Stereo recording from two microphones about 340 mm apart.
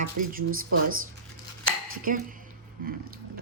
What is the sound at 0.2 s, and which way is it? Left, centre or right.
Speech, right.